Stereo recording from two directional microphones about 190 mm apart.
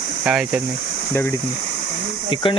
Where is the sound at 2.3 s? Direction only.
25° left (ahead or behind).